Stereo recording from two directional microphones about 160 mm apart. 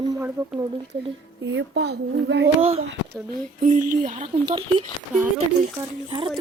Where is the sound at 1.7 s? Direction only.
90° right.